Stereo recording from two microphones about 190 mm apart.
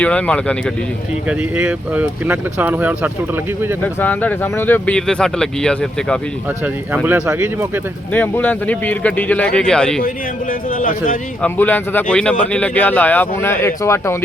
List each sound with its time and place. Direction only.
0.0 s speech: 5° left (ahead or behind)
1.3 s speech: 10° right (ahead or behind)
4.0 s speech: 10° left (ahead or behind)
6.9 s speech: 10° right (ahead or behind)
8.1 s speech: 10° left (ahead or behind)
10.8 s speech: 45° left (ahead or behind)
11.4 s speech: 10° left (ahead or behind)